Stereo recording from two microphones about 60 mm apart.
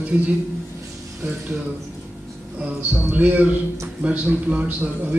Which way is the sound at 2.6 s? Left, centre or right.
Right.